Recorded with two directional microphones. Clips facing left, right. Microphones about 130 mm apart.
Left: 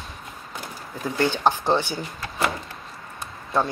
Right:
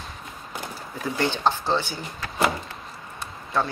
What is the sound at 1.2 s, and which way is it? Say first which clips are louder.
Speech: left 3 dB; 15° left (ahead or behind).